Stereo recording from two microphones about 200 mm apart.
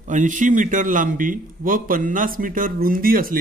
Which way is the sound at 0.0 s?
40° right (ahead or behind).